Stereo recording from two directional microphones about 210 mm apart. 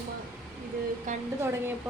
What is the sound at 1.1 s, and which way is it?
Speech, 35° right (ahead or behind).